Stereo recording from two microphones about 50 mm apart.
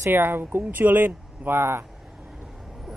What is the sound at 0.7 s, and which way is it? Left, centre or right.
Speech, right.